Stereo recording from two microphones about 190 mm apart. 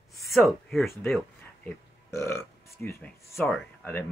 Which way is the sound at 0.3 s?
Centre (ahead or behind).